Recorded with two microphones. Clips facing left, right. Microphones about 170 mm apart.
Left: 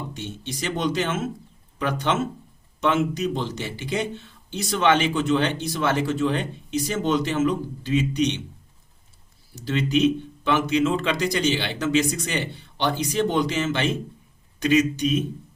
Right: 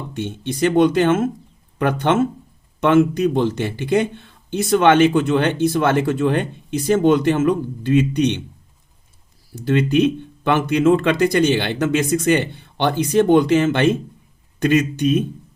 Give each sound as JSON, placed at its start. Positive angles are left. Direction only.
{"t": 0.1, "sound": "speech", "side_deg": -55}
{"t": 9.6, "sound": "speech", "side_deg": -55}